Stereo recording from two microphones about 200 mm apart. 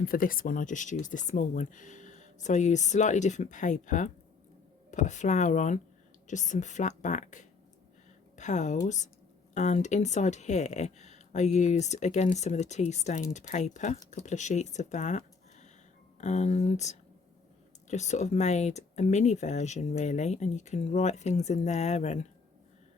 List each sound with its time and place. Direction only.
0.0 s speech: 45° left (ahead or behind)